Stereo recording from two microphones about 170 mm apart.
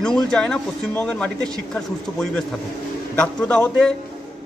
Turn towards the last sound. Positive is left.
turn(degrees=5)  # may be behind; listen again after turning